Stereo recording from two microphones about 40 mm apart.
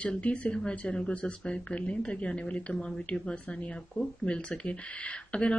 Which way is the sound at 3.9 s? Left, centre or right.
Left.